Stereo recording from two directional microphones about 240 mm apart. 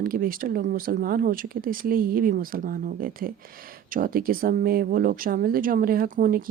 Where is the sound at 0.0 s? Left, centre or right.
Right.